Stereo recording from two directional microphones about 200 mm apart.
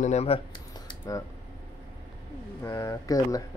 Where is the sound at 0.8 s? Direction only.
20° left (ahead or behind).